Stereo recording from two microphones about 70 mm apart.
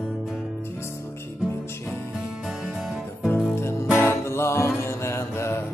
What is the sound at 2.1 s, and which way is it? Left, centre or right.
Music, centre.